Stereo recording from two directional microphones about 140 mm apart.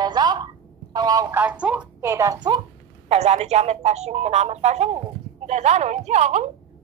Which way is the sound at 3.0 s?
50° right (ahead or behind).